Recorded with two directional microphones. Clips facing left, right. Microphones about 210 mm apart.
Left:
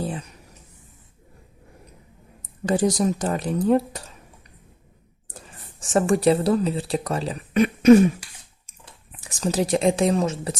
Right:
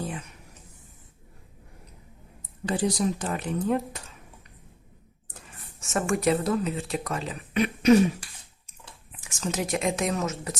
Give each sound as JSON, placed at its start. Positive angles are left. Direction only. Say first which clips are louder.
{"t": 0.0, "sound": "speech", "louder": "left 5 dB", "side_deg": 35}
{"t": 2.6, "sound": "speech", "louder": "left 5 dB", "side_deg": 45}
{"t": 5.8, "sound": "speech", "louder": "left 6 dB", "side_deg": 30}
{"t": 9.2, "sound": "speech", "louder": "left 6 dB", "side_deg": 35}